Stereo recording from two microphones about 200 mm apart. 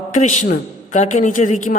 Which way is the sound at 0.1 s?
35° left (ahead or behind).